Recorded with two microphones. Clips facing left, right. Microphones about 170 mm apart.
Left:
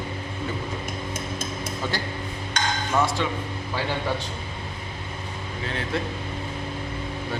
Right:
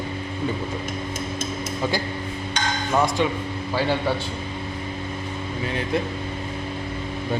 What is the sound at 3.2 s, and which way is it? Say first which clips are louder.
Speech: right 5 dB; 15° right (ahead or behind).